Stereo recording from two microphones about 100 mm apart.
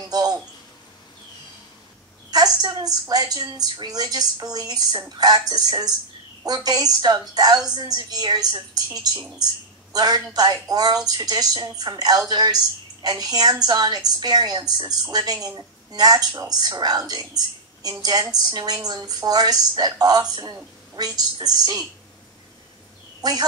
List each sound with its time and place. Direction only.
0.1 s a sound: 40° right (ahead or behind)
2.3 s a woman's voice: 40° right (ahead or behind)
23.2 s a woman's voice: 40° right (ahead or behind)